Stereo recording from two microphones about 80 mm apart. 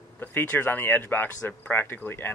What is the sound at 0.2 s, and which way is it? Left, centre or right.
Speech, left.